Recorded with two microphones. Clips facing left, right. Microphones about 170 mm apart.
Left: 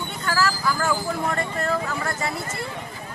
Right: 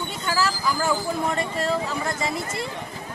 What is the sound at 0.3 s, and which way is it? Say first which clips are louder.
Speech: left 1 dB; 15° right (ahead or behind).